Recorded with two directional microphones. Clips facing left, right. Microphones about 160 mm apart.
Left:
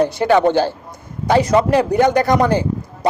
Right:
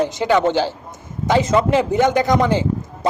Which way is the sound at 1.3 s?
20° right (ahead or behind).